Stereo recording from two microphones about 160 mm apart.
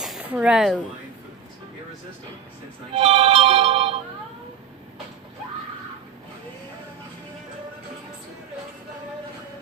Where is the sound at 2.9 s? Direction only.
40° right (ahead or behind).